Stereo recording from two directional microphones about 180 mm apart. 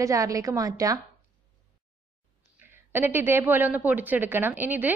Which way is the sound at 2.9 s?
10° right (ahead or behind).